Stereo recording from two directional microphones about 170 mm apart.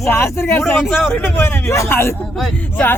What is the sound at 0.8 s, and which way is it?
Speech, centre (ahead or behind).